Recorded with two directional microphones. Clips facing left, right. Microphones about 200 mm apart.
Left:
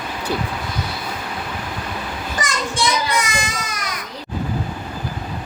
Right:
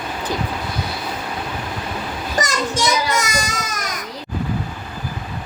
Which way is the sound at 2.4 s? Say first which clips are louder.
Right 2 dB; 40° right (ahead or behind).